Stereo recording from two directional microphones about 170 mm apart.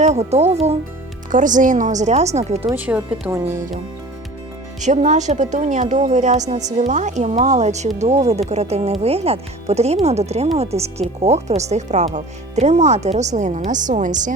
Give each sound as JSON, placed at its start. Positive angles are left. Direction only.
{"t": 0.0, "sound": "speech", "side_deg": -40}
{"t": 1.3, "sound": "speech", "side_deg": -50}
{"t": 2.7, "sound": "speech", "side_deg": -10}
{"t": 4.8, "sound": "speech", "side_deg": -45}